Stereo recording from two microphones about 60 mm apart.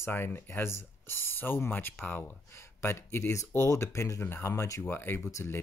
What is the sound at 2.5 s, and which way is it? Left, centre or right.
Speech, left.